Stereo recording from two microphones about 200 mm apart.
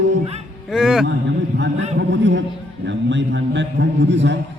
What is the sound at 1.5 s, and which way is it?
Speech, 65° right (ahead or behind).